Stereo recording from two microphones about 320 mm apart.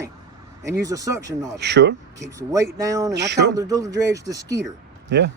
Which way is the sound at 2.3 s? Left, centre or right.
Centre.